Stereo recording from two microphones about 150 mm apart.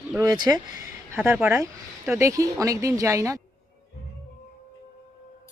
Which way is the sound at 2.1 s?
20° right (ahead or behind).